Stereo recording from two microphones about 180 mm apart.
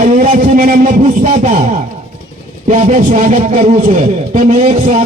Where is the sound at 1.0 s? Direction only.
35° right (ahead or behind).